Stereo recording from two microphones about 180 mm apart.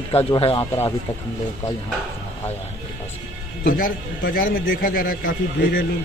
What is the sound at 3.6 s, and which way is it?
A man's voice, 55° left (ahead or behind).